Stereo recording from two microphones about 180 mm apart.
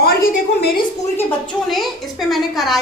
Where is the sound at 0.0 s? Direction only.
55° left (ahead or behind).